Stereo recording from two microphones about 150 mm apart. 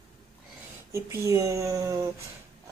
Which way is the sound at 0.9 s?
20° right (ahead or behind).